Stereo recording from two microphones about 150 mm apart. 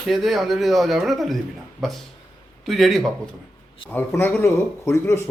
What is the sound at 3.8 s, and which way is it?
A man's voice, 15° left (ahead or behind).